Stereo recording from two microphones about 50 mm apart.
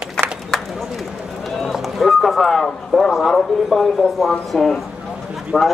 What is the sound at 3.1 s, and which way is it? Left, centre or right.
Speech, centre.